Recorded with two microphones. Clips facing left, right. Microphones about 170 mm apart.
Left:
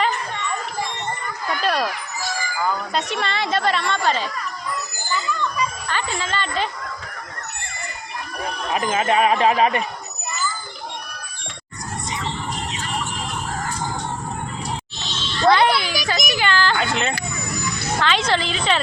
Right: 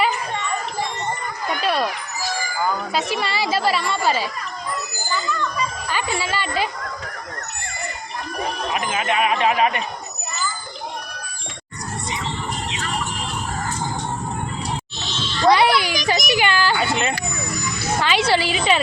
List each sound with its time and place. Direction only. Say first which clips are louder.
1.6 s a sound: even; 5° right (ahead or behind)
2.6 s speech: right 1 dB; 5° right (ahead or behind)
5.9 s a woman's voice: right 1 dB; 10° right (ahead or behind)
8.7 s speech: left 5 dB; 35° left (ahead or behind)
15.4 s a sound: right 1 dB; 10° right (ahead or behind)
16.0 s a child's voice: right 2 dB; 15° right (ahead or behind)